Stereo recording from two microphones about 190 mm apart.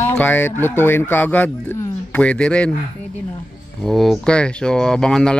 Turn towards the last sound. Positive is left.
turn(degrees=5)  # may be behind; listen again after turning